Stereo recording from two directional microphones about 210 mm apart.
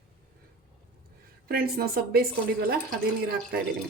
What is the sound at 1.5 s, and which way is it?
Speech, 45° right (ahead or behind).